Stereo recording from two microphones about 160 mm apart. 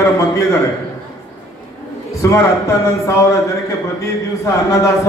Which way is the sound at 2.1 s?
20° left (ahead or behind).